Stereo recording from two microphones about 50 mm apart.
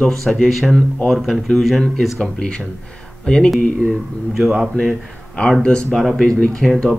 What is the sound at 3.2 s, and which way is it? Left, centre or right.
Speech, centre.